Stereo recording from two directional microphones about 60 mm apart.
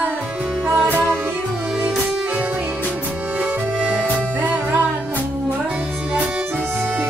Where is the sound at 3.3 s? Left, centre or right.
Right.